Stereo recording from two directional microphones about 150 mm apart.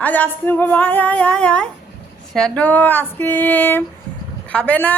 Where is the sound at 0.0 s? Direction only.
10° left (ahead or behind).